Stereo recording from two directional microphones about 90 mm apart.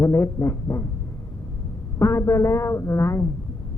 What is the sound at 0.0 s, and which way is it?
Speech, 30° left (ahead or behind).